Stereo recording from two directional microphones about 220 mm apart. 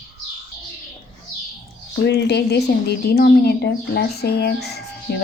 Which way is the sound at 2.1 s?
50° left (ahead or behind).